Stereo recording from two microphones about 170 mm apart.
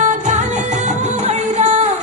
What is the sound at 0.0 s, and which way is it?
Music, 45° right (ahead or behind).